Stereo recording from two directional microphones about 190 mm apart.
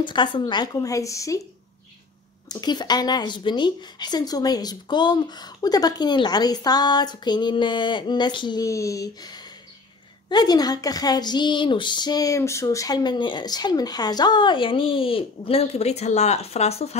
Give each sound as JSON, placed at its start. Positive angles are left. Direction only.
{"t": 0.0, "sound": "speech", "side_deg": 25}
{"t": 2.5, "sound": "speech", "side_deg": 20}
{"t": 10.3, "sound": "speech", "side_deg": 20}